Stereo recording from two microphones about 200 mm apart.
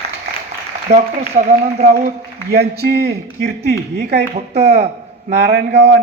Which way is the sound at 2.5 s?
55° right (ahead or behind).